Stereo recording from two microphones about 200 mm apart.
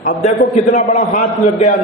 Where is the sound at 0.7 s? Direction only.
35° left (ahead or behind).